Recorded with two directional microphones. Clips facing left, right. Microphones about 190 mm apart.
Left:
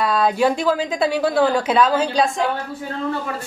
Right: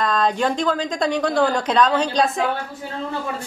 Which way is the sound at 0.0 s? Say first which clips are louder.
Left 2 dB; 5° left (ahead or behind).